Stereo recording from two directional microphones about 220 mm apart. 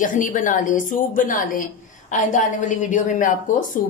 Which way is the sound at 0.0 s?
35° left (ahead or behind).